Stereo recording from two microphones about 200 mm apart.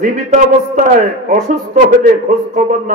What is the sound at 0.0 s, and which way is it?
Speech, 35° right (ahead or behind).